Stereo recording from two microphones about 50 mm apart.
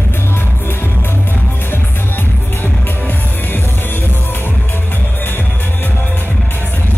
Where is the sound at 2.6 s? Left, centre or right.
Left.